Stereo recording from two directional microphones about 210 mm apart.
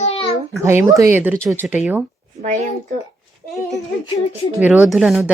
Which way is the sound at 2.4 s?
35° right (ahead or behind).